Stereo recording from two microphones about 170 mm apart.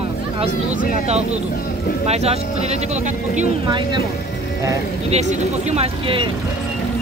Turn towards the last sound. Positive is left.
turn(degrees=-35)  # may be behind; listen again after turning